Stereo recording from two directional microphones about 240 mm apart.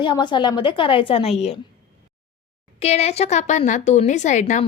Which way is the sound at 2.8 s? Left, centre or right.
Left.